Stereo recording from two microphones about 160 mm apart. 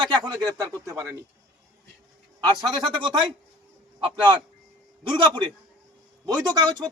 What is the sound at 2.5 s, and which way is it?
A man's voice, 25° right (ahead or behind).